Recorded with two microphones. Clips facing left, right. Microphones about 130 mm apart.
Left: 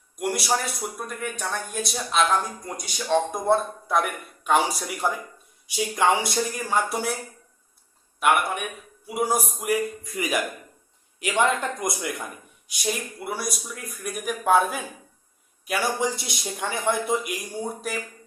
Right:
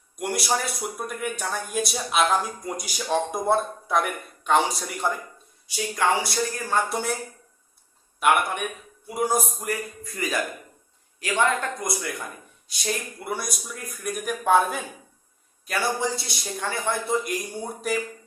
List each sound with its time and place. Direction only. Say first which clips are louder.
0.2 s speech: left 1 dB; centre (ahead or behind)
5.6 s speech: left 2 dB; 20° left (ahead or behind)
8.2 s speech: even; centre (ahead or behind); by 12.1 s 20° left (ahead or behind)
12.6 s speech: left 1 dB; 10° left (ahead or behind)
15.6 s speech: left 1 dB; 15° left (ahead or behind)